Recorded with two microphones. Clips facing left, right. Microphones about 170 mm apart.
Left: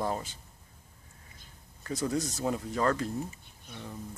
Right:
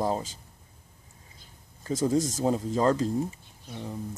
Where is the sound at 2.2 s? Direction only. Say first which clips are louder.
Right 6 dB; 90° right.